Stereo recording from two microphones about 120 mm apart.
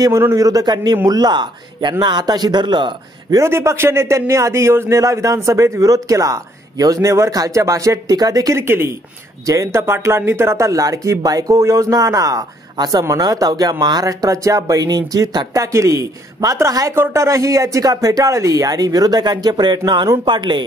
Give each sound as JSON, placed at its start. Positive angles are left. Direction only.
{"t": 0.0, "sound": "a man's voice", "side_deg": -25}
{"t": 3.3, "sound": "a man's voice", "side_deg": -20}